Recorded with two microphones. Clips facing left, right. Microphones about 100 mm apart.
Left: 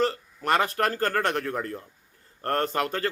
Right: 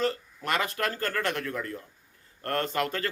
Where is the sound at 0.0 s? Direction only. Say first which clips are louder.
Left 3 dB; 40° left (ahead or behind).